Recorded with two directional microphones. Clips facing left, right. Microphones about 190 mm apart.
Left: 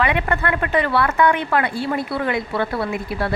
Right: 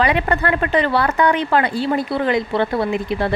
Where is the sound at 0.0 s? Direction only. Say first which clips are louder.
Right 3 dB; 30° right (ahead or behind).